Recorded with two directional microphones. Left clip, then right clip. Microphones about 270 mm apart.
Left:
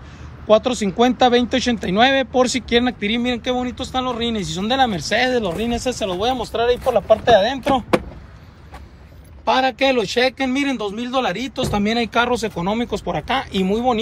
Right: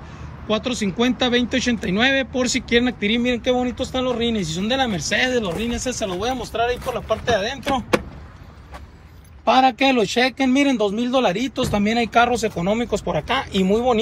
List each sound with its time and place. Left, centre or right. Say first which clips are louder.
0.5 s speech: left 7 dB; centre
6.9 s speech: left 8 dB; left
9.4 s speech: right 1 dB; centre